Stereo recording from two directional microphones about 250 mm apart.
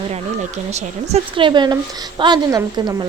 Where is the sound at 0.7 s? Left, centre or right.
Right.